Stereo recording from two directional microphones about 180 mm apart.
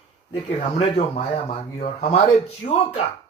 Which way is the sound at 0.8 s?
35° left (ahead or behind).